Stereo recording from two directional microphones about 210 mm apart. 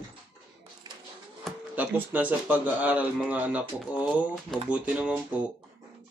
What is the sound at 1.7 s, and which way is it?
A man's voice, 5° right (ahead or behind).